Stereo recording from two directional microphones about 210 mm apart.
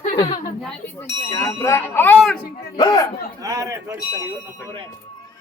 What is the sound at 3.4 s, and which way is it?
Speech, 15° right (ahead or behind).